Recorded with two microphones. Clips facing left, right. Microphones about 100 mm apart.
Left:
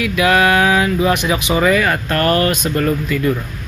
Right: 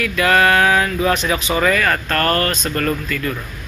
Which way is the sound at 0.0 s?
15° left (ahead or behind).